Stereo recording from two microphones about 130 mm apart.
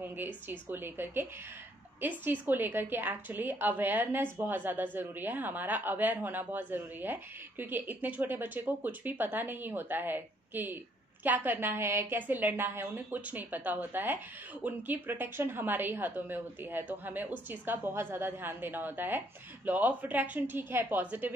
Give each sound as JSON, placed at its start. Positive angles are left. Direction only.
{"t": 0.0, "sound": "a woman's voice", "side_deg": -15}